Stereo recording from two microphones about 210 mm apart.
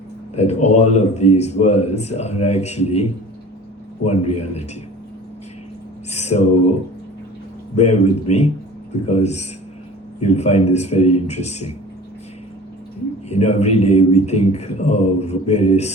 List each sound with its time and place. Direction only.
0.3 s speech: 30° left (ahead or behind)
6.1 s speech: 30° left (ahead or behind)
7.8 s speech: 30° left (ahead or behind)
13.2 s speech: 30° left (ahead or behind)